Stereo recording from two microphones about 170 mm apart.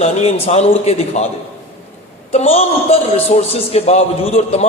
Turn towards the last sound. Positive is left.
turn(degrees=40)  # may be behind; listen again after turning